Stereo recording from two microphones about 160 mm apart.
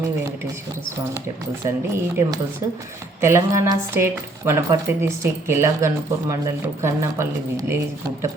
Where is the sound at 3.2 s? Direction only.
15° right (ahead or behind).